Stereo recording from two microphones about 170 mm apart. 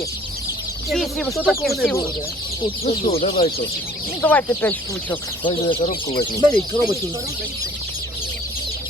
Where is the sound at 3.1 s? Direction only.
35° left (ahead or behind).